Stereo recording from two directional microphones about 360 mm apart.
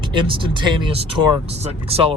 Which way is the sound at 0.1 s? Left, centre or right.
Centre.